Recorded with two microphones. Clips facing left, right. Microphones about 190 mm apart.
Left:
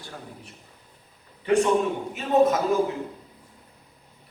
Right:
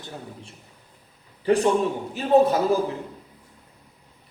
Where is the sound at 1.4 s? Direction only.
35° right (ahead or behind).